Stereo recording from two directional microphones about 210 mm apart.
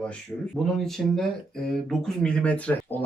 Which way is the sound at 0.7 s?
Centre (ahead or behind).